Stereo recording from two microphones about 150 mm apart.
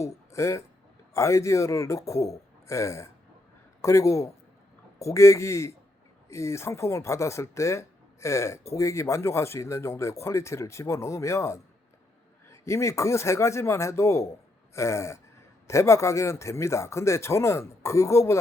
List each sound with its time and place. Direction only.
0.3 s speech: 20° left (ahead or behind)